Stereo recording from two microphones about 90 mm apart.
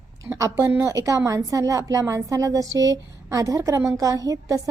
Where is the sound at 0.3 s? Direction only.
30° right (ahead or behind).